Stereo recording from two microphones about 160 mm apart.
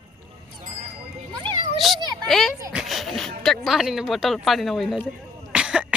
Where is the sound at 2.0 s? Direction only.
25° right (ahead or behind).